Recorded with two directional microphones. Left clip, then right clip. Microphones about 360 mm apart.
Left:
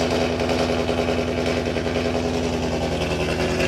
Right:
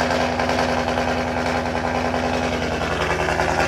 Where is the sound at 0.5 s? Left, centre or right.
Centre.